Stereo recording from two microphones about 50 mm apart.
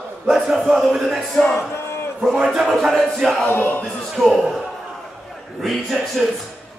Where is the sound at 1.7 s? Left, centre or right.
Left.